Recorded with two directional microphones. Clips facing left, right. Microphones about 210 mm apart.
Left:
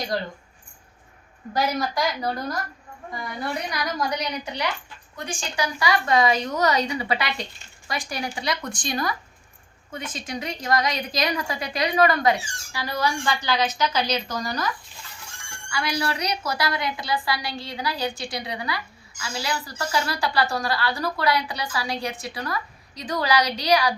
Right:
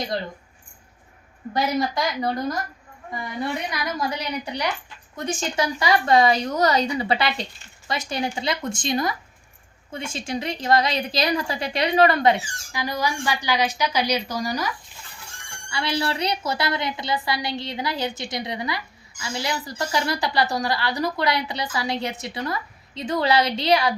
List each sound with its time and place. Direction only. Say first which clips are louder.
1.5 s a woman's voice: right 1 dB; 20° right (ahead or behind)
12.7 s a woman's voice: even; 15° right (ahead or behind)
15.7 s a woman's voice: right 1 dB; 25° right (ahead or behind)